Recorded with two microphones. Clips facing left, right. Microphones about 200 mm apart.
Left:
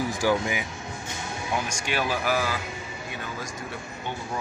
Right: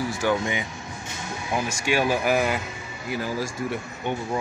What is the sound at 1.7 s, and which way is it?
Speech, 10° right (ahead or behind).